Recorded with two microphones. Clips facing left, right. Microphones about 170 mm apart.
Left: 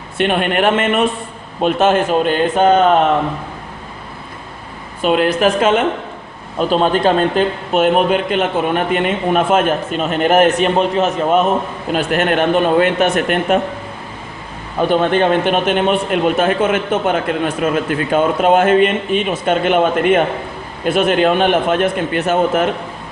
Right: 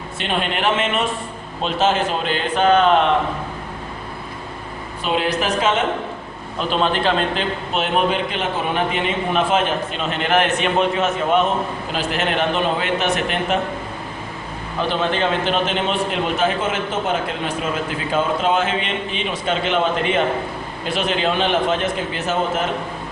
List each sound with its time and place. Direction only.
0.2 s a man's voice: 55° left (ahead or behind)
5.0 s a man's voice: 55° left (ahead or behind)
11.9 s a man's voice: 55° left (ahead or behind)
14.8 s a man's voice: 50° left (ahead or behind)